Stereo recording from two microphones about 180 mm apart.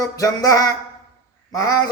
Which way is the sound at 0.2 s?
20° left (ahead or behind).